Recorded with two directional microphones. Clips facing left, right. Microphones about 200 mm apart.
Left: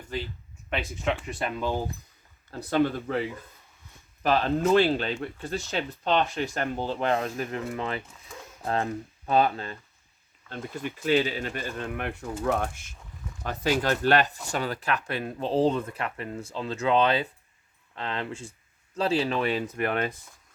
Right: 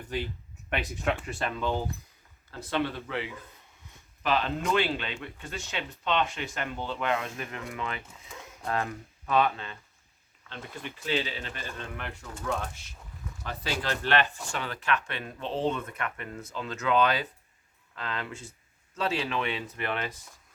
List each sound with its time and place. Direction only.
0.7 s speech: centre (ahead or behind)
2.5 s speech: 40° left (ahead or behind)
11.0 s speech: 45° left (ahead or behind)
13.4 s speech: 45° left (ahead or behind)